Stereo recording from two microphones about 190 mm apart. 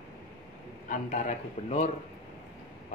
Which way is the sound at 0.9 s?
40° left (ahead or behind).